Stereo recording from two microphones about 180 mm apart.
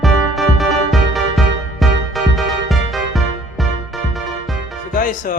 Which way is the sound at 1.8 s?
Centre (ahead or behind).